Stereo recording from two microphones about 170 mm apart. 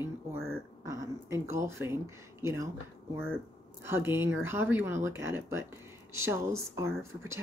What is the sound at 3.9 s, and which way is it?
Speech, 15° right (ahead or behind).